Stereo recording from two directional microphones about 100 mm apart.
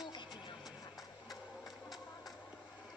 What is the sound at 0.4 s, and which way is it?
Music, 50° left (ahead or behind).